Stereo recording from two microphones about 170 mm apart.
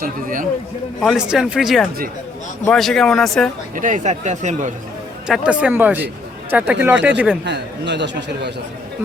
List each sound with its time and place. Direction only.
0.0 s speech: 55° right (ahead or behind)
1.0 s speech: 5° right (ahead or behind)
3.8 s speech: 50° right (ahead or behind)
5.3 s speech: 5° right (ahead or behind)
7.4 s speech: 90° right